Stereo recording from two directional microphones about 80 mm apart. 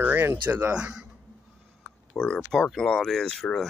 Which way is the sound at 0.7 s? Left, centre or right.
Centre.